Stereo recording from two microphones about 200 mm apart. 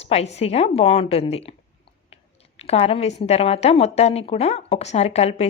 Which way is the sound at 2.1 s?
30° left (ahead or behind).